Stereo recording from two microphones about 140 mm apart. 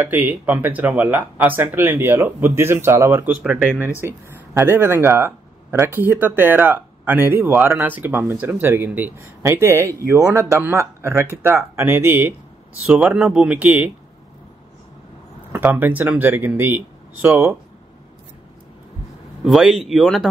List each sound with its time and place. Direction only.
0.0 s speech: 15° right (ahead or behind)
15.5 s speech: 15° right (ahead or behind)
19.4 s speech: centre (ahead or behind)